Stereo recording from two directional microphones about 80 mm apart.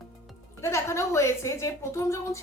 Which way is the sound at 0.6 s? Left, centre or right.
Left.